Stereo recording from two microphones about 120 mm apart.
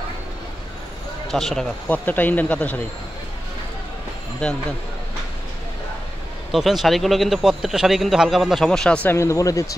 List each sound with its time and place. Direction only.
1.3 s a man's voice: 5° left (ahead or behind)
4.4 s a man's voice: 5° left (ahead or behind)
6.5 s a man's voice: centre (ahead or behind)
9.1 s speech: 25° left (ahead or behind)